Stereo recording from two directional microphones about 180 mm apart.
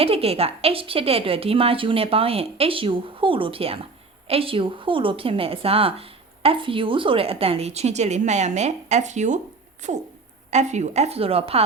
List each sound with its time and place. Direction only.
0.0 s speech: 35° right (ahead or behind)
10.5 s speech: 40° right (ahead or behind)